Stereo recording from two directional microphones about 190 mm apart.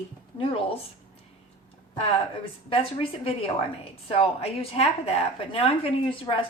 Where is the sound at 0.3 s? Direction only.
30° left (ahead or behind).